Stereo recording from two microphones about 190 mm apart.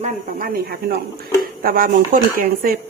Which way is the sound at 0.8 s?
55° right (ahead or behind).